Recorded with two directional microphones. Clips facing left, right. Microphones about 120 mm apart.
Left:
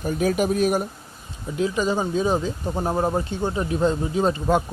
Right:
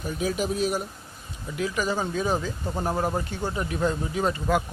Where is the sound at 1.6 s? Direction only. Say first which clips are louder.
Left 4 dB; 25° left (ahead or behind).